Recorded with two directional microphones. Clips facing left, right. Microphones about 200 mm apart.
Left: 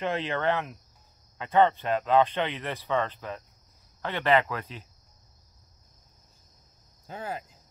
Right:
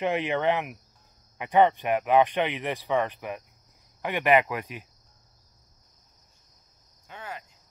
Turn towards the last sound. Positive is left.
turn(degrees=35)  # may be behind; listen again after turning